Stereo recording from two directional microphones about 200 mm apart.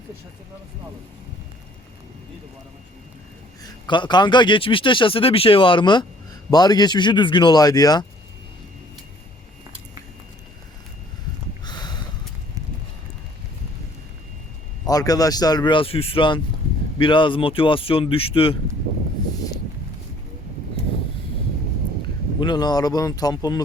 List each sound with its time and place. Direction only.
3.6 s a man's voice: 25° left (ahead or behind)
11.6 s a sound: 20° left (ahead or behind)
14.8 s a man's voice: 20° left (ahead or behind)
22.4 s a man's voice: 20° left (ahead or behind)